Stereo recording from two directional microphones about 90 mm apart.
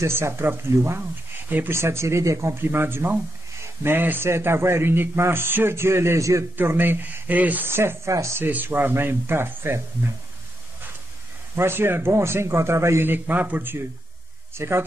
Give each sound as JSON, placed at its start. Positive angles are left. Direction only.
{"t": 0.0, "sound": "a man's voice", "side_deg": -30}
{"t": 6.5, "sound": "a man's voice", "side_deg": -25}
{"t": 8.5, "sound": "a man's voice", "side_deg": -20}
{"t": 11.5, "sound": "a man's voice", "side_deg": -25}